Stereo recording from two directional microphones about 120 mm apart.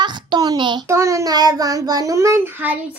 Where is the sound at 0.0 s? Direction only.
40° right (ahead or behind).